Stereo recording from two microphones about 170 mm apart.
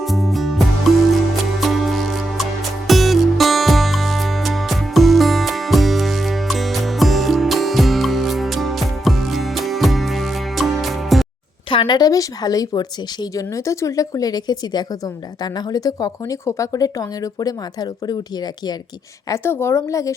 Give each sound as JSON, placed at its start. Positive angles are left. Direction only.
{"t": 0.0, "sound": "music", "side_deg": 0}
{"t": 11.7, "sound": "speech", "side_deg": 30}
{"t": 19.3, "sound": "speech", "side_deg": 15}